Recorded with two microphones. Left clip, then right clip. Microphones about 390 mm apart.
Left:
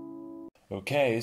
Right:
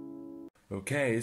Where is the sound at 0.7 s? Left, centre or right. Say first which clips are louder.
Left 4 dB; left.